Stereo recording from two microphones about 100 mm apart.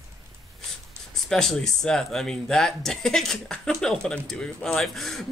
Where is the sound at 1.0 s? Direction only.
25° right (ahead or behind).